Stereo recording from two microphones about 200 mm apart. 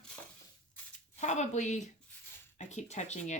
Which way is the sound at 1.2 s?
35° left (ahead or behind).